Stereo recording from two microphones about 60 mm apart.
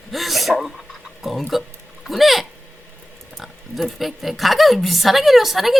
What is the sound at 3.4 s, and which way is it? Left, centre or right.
A woman's voice, centre.